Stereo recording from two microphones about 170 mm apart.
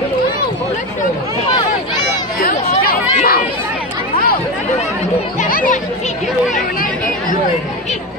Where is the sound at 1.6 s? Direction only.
25° left (ahead or behind).